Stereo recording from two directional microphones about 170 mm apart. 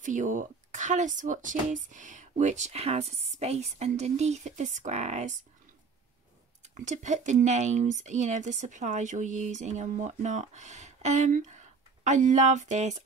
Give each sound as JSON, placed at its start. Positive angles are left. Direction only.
{"t": 0.0, "sound": "speech", "side_deg": -50}
{"t": 6.8, "sound": "speech", "side_deg": -45}